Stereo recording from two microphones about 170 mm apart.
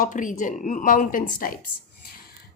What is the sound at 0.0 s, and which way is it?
A woman's voice, 50° left (ahead or behind).